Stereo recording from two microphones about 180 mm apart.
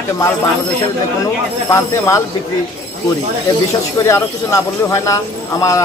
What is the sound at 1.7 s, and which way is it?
Speech, 15° left (ahead or behind).